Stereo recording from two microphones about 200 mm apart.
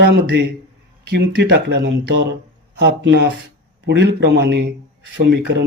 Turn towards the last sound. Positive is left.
turn(degrees=-60)  # may be behind; listen again after turning